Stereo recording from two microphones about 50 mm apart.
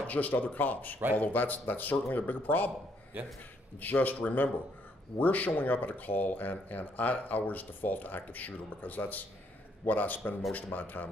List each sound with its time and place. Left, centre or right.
0.0 s speech: left
3.8 s speech: left